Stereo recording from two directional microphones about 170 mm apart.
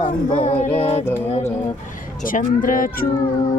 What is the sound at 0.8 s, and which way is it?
Music, 35° left (ahead or behind).